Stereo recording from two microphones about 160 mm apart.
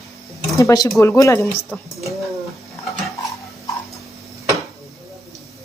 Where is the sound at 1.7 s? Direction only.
5° left (ahead or behind).